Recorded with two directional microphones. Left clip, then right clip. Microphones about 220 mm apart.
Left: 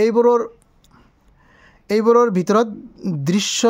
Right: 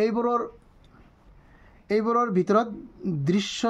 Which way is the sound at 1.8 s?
50° left (ahead or behind).